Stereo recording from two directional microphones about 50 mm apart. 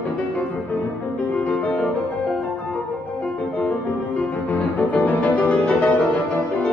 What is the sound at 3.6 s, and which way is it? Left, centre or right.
Music, left.